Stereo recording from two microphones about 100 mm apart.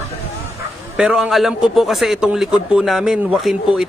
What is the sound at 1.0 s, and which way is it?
Speech, 10° right (ahead or behind).